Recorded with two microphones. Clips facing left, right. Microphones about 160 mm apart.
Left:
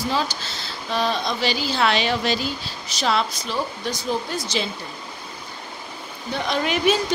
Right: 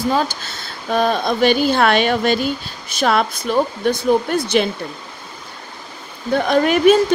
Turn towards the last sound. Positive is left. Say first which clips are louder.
# right 8 dB
turn(degrees=-50)  # may be behind; listen again after turning